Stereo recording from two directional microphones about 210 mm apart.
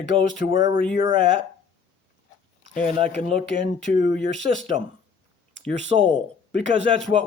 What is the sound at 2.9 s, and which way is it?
Speech, 30° right (ahead or behind).